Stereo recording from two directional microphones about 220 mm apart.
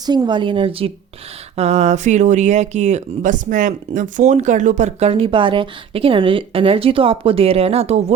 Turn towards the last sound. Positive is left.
turn(degrees=-30)  # may be behind; listen again after turning